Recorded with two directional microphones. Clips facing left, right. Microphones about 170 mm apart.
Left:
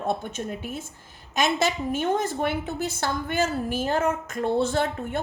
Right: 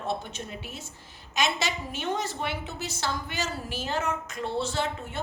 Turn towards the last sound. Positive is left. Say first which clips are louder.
# left 5 dB
turn(degrees=50)  # may be behind; listen again after turning